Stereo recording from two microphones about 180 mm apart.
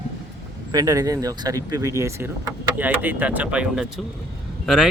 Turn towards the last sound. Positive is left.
turn(degrees=-5)  # may be behind; listen again after turning